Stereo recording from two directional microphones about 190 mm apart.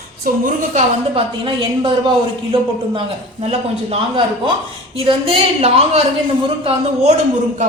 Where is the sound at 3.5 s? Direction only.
30° right (ahead or behind).